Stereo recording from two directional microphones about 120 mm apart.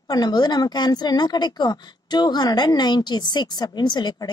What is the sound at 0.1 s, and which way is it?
A woman's voice, 35° left (ahead or behind).